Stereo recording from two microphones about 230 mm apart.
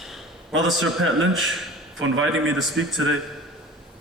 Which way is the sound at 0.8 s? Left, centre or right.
Right.